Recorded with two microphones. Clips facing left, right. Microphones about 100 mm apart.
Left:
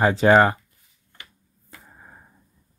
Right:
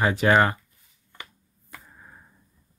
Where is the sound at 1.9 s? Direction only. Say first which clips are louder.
Left 2 dB; 30° left (ahead or behind).